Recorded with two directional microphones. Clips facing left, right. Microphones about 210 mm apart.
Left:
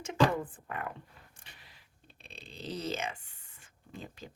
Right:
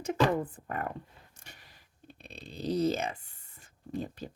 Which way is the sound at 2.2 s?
40° right (ahead or behind).